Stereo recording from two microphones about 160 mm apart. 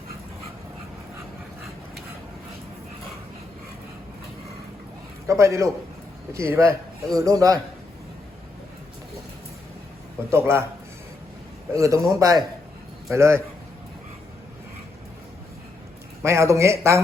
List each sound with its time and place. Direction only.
5.2 s a man's voice: 20° right (ahead or behind)
10.2 s speech: 15° right (ahead or behind)
11.7 s a man's voice: 20° right (ahead or behind)
16.2 s speech: 20° right (ahead or behind)